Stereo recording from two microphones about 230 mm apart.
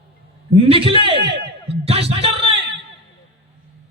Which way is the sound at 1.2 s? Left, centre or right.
Right.